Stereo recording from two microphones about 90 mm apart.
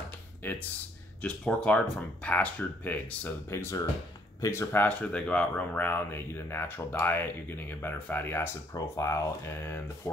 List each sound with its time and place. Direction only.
0.4 s speech: 20° left (ahead or behind)
3.4 s speech: 30° left (ahead or behind)
4.7 s speech: 15° left (ahead or behind)
8.7 s speech: 35° left (ahead or behind)